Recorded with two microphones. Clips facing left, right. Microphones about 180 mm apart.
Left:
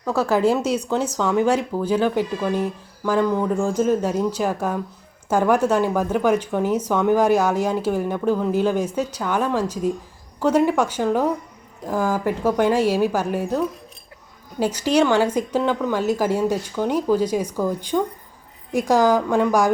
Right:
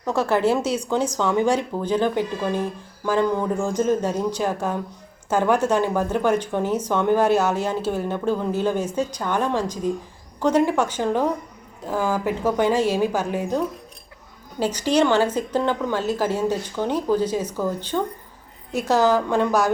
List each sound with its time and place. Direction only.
0.1 s speech: 10° left (ahead or behind)
12.4 s speech: 10° left (ahead or behind)
14.6 s speech: 10° left (ahead or behind)